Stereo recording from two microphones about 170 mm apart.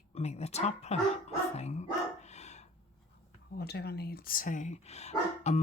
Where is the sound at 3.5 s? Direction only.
70° left (ahead or behind).